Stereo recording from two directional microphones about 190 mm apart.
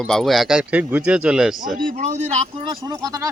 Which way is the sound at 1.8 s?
45° right (ahead or behind).